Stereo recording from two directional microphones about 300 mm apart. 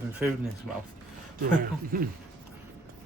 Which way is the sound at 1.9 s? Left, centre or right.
Right.